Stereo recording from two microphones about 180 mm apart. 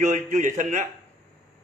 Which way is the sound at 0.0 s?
45° right (ahead or behind).